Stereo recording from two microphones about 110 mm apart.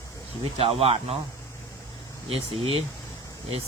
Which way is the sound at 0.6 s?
65° right (ahead or behind).